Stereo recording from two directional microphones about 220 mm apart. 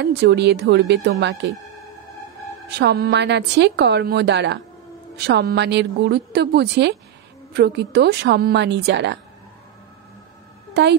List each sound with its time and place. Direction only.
0.0 s a woman's voice: 50° right (ahead or behind)
2.8 s a woman's voice: 45° right (ahead or behind)
10.7 s speech: 50° right (ahead or behind)